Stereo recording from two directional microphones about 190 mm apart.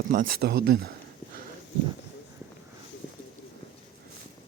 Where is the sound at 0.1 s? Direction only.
50° right (ahead or behind).